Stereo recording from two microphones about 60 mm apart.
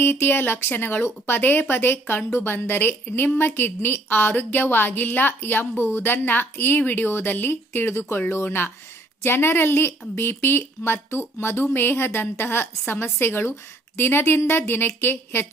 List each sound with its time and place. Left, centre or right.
0.0 s a woman's voice: left